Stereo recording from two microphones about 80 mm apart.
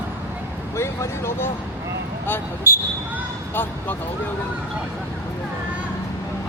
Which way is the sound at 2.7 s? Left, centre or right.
Right.